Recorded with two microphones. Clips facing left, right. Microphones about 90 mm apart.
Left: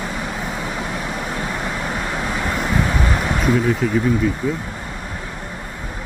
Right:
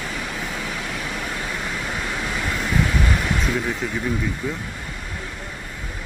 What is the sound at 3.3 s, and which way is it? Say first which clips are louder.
Speech: left 6 dB; 5° left (ahead or behind).